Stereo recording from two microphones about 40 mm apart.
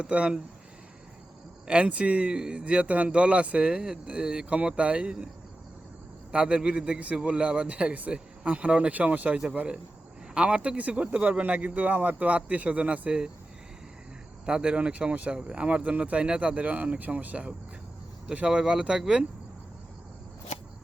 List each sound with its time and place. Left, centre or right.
0.0 s speech: right
1.6 s speech: right
2.3 s speech: right
3.7 s speech: centre
6.3 s speech: right
10.3 s speech: right
12.3 s speech: right
14.4 s speech: right
15.3 s speech: right
18.4 s speech: right